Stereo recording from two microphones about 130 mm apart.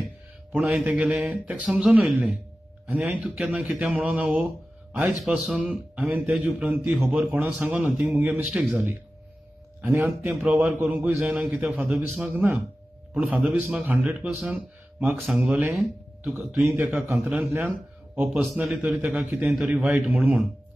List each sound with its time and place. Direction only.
0.5 s a man's voice: 5° right (ahead or behind)